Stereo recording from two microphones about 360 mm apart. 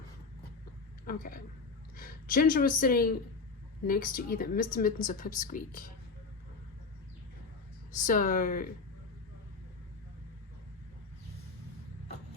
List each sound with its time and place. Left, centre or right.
1.0 s speech: left
8.0 s speech: left